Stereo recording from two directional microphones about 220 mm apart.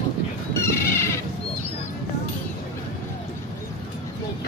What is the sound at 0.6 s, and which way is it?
Cat, 10° left (ahead or behind).